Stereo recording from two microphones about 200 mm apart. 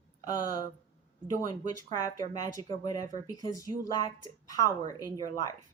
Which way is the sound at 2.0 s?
15° left (ahead or behind).